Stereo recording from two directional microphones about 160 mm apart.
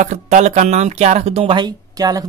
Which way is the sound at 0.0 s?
45° right (ahead or behind).